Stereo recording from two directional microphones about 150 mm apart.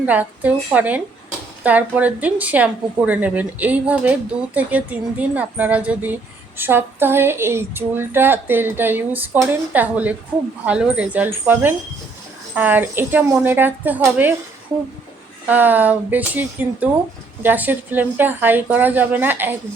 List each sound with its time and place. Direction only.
0.0 s a woman's voice: 10° right (ahead or behind)
15.4 s a woman's voice: 10° right (ahead or behind)